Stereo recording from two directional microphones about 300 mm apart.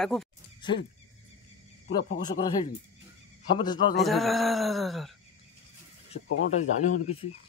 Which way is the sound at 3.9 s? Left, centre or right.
Centre.